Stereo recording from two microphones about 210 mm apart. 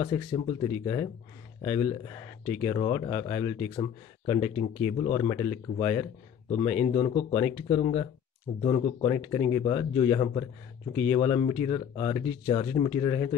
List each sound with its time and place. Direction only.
0.0 s speech: 25° left (ahead or behind)